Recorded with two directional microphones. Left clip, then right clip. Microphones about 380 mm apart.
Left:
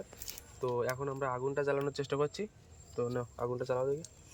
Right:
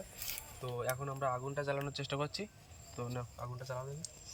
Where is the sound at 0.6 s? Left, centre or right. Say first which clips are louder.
Left 5 dB; centre.